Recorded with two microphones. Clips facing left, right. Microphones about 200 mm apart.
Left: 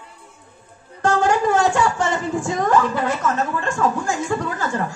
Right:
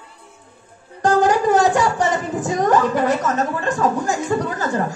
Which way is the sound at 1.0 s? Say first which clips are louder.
Right 2 dB; 35° right (ahead or behind).